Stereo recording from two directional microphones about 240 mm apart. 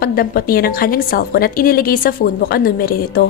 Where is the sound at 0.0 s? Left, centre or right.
Left.